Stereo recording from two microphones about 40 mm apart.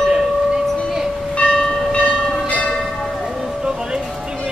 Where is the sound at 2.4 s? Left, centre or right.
Left.